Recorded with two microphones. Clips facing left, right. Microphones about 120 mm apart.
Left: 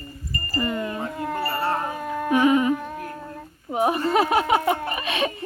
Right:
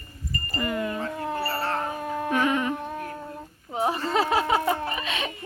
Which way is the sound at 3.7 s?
15° left (ahead or behind).